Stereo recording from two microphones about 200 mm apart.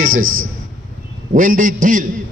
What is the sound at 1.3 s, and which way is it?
Speech, 40° right (ahead or behind).